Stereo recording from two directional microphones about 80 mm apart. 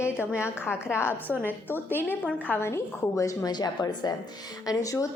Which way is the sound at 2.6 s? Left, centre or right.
Left.